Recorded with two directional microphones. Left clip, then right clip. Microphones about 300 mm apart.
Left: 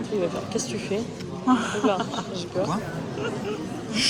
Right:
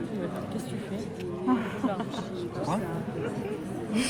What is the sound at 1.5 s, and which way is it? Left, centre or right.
Speech, centre.